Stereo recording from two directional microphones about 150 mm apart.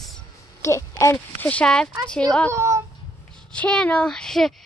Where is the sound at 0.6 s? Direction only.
20° left (ahead or behind).